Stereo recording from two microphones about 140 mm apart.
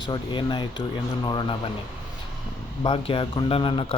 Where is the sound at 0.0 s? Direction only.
35° left (ahead or behind).